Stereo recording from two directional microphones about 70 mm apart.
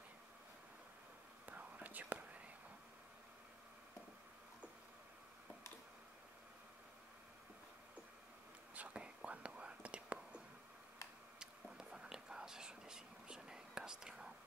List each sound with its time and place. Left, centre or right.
1.4 s whispering: right
8.7 s whispering: centre